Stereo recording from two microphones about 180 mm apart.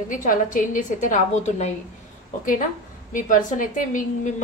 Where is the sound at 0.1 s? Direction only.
45° left (ahead or behind).